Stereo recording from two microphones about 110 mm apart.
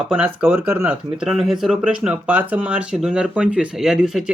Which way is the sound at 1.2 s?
5° right (ahead or behind).